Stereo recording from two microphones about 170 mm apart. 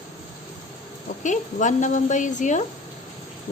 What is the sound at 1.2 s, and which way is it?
A woman's voice, 45° left (ahead or behind).